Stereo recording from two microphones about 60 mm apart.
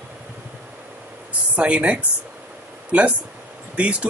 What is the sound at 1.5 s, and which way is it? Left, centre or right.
Speech, right.